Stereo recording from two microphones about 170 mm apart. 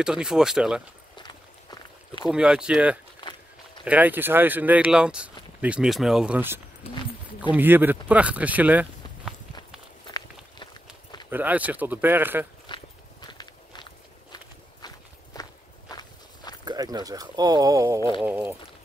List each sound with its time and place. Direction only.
0.0 s speech: 5° right (ahead or behind)
1.1 s a sound: 25° left (ahead or behind)
2.2 s speech: 5° right (ahead or behind)
10.0 s walk: 25° left (ahead or behind)
11.2 s speech: 10° right (ahead or behind)
12.7 s walk: 25° left (ahead or behind)
15.3 s walk: 20° left (ahead or behind)
16.6 s speech: 25° right (ahead or behind)